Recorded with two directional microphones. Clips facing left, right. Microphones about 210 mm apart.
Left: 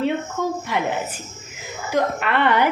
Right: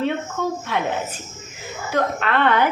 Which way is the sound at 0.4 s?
10° left (ahead or behind).